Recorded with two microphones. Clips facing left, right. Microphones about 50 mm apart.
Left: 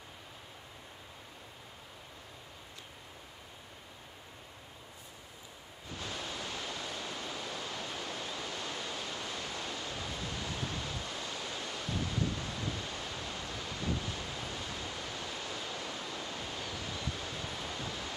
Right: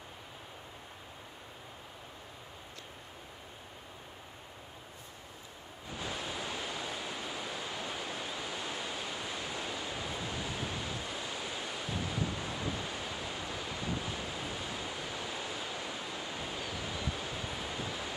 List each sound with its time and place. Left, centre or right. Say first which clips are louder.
5.9 s pink noise: right 2 dB; centre